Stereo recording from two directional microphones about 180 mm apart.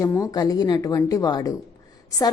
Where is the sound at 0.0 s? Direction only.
20° left (ahead or behind).